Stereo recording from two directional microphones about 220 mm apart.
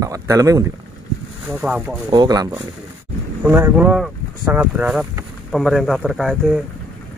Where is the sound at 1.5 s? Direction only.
5° right (ahead or behind).